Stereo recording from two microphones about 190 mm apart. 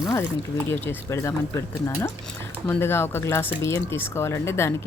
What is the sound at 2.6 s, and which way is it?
Speech, 10° left (ahead or behind).